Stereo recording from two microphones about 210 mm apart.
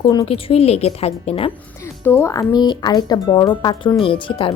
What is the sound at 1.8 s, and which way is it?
A woman's voice, 10° left (ahead or behind).